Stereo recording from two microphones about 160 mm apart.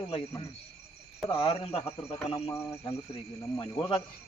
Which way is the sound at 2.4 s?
15° left (ahead or behind).